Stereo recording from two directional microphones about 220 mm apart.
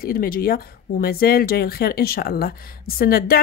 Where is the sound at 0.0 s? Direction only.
40° left (ahead or behind).